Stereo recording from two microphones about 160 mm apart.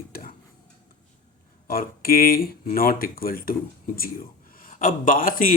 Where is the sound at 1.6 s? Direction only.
65° left (ahead or behind).